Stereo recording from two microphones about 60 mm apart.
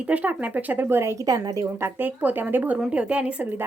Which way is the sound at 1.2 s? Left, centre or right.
Right.